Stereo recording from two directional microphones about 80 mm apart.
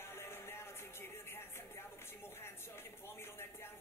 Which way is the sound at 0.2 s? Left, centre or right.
Left.